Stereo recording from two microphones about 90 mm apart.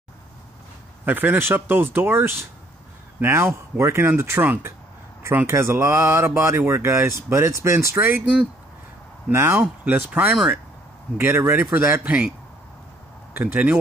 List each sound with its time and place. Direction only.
1.0 s speech: 20° right (ahead or behind)
9.3 s speech: 25° right (ahead or behind)
9.6 s speech: 15° right (ahead or behind)
13.3 s speech: 20° right (ahead or behind)